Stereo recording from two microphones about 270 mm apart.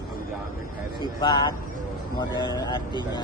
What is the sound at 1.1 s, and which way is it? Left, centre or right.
Speech, centre.